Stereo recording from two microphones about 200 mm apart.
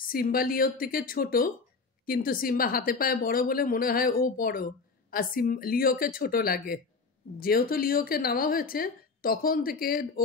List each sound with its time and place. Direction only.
0.0 s a woman's voice: 45° left (ahead or behind)